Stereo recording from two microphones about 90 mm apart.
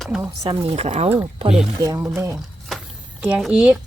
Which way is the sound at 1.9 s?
30° right (ahead or behind).